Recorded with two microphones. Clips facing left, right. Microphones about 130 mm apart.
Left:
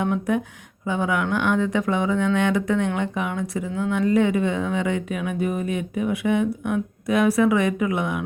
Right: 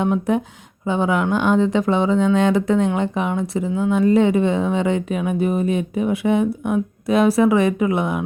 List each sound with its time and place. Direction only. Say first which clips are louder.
0.0 s speech: right 4 dB; 30° right (ahead or behind)